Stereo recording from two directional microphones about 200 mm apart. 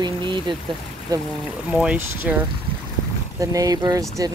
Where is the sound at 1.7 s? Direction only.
5° right (ahead or behind).